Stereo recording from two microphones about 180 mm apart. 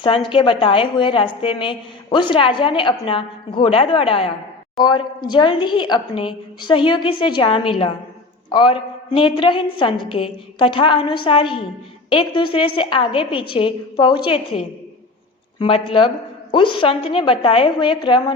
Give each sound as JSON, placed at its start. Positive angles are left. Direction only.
{"t": 0.3, "sound": "a woman's voice", "side_deg": 30}